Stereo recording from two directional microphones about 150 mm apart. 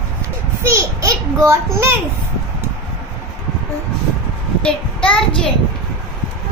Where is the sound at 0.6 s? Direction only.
20° right (ahead or behind).